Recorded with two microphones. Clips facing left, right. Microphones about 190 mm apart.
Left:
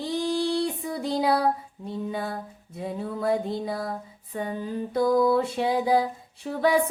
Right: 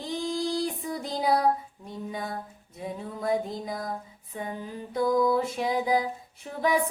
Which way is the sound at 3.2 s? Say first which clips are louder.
Left 2 dB; 30° left (ahead or behind).